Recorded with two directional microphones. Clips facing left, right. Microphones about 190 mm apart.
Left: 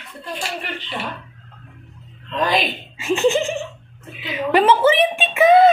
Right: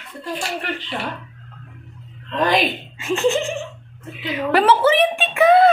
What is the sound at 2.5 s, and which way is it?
Speech, centre (ahead or behind).